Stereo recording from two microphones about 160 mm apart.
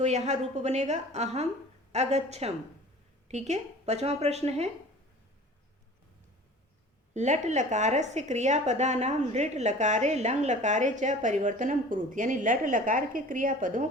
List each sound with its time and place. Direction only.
0.0 s a woman's voice: 45° right (ahead or behind)
7.1 s a woman's voice: 45° right (ahead or behind)